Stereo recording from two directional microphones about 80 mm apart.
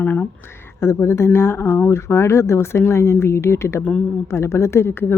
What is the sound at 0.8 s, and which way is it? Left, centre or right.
Speech, left.